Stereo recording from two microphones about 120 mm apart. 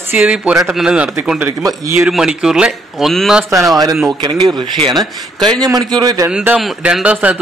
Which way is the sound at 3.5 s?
25° right (ahead or behind).